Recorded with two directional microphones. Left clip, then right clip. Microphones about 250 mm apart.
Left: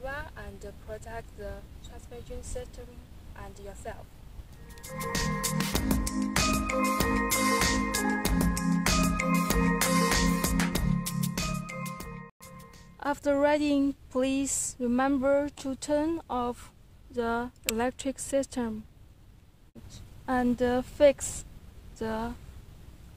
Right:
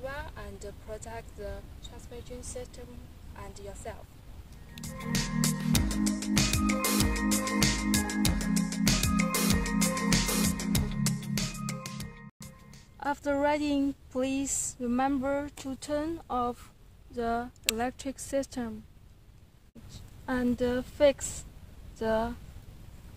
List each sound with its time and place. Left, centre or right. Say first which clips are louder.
0.0 s a sound: left 1 dB; centre
3.3 s a woman's voice: even; centre
4.8 s music: left 3 dB; centre
13.0 s speech: left 3 dB; left
19.9 s speech: left 3 dB; left